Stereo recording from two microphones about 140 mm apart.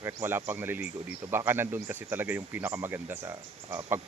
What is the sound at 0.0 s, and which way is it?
Speech, 15° right (ahead or behind).